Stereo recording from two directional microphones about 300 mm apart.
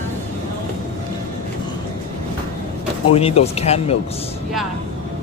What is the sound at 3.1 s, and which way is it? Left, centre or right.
Speech, centre.